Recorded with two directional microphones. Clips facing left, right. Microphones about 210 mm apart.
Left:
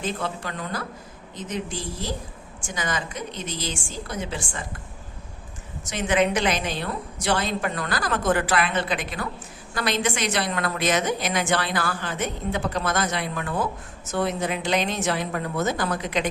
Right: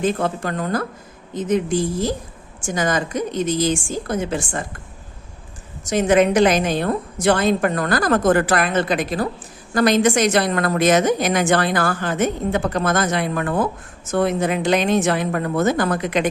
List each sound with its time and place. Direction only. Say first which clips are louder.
0.0 s a woman's voice: right 8 dB; 50° right (ahead or behind)
5.8 s a woman's voice: right 7 dB; 45° right (ahead or behind)